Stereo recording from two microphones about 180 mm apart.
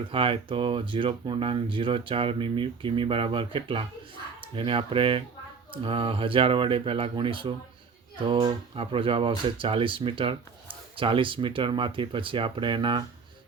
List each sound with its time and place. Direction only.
0.1 s speech: 30° right (ahead or behind)